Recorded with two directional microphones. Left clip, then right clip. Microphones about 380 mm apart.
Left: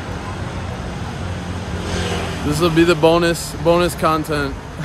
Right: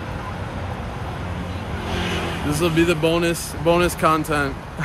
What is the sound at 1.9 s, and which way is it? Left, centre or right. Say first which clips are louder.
Vehicle: left 2 dB; centre.